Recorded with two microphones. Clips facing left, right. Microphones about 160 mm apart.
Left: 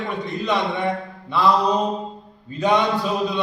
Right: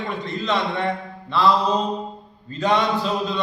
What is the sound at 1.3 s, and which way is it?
A man's voice, 10° left (ahead or behind).